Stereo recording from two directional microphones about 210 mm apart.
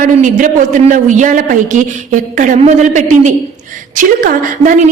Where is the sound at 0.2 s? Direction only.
35° right (ahead or behind).